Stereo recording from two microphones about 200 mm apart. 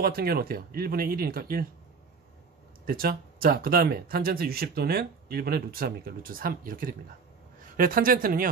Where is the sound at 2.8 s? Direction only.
45° right (ahead or behind).